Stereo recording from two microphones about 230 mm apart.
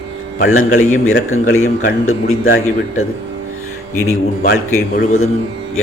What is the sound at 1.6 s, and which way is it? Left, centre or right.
Speech, left.